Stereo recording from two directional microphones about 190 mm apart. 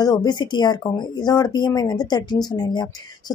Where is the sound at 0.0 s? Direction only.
20° left (ahead or behind).